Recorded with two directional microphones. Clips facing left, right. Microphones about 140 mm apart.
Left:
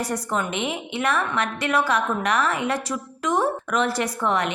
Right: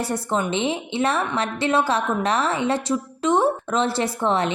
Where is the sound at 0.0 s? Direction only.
30° right (ahead or behind).